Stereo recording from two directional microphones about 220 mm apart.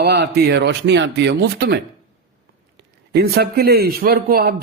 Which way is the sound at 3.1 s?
50° right (ahead or behind).